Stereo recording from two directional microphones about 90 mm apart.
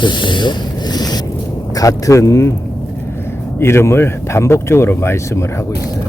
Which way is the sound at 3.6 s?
30° left (ahead or behind).